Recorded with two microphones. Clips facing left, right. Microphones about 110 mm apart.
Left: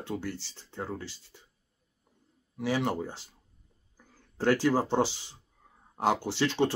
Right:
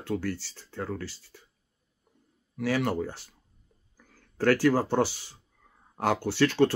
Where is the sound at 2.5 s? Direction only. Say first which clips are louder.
Right 2 dB; 15° left (ahead or behind).